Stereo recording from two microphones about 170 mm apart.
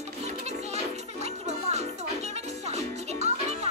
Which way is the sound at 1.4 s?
40° right (ahead or behind).